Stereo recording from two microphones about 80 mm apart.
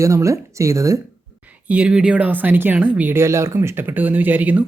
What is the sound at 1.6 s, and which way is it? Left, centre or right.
Speech, centre.